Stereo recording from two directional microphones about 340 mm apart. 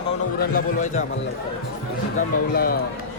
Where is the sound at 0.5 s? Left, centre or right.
Left.